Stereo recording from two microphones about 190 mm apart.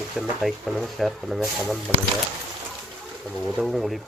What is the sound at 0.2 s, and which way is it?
Speech, centre (ahead or behind).